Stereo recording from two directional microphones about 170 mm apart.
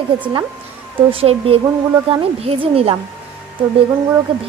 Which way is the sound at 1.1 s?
35° right (ahead or behind).